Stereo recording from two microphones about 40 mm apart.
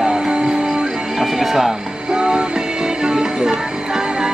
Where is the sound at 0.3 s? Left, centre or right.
Centre.